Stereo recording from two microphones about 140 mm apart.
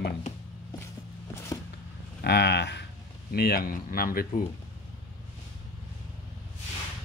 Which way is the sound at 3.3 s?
90° left.